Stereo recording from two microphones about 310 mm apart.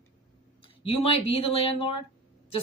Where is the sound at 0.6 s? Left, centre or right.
Centre.